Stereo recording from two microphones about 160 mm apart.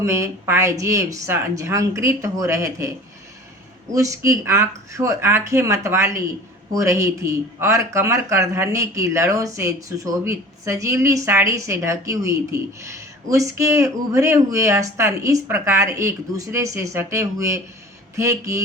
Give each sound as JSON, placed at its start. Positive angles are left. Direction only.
{"t": 0.0, "sound": "speech", "side_deg": -20}
{"t": 3.9, "sound": "speech", "side_deg": -20}